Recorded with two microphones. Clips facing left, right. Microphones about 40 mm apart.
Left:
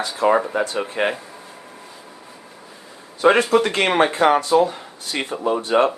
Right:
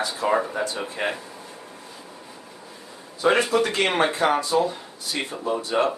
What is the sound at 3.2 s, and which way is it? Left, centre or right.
Speech, left.